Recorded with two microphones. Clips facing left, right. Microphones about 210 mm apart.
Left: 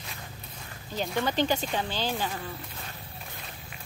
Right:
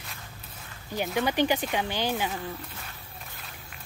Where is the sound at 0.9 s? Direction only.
10° right (ahead or behind).